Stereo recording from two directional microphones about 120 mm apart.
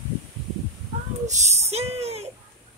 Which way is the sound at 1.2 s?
75° right (ahead or behind).